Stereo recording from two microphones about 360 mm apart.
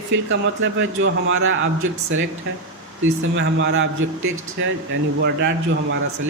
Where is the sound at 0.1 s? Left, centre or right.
Right.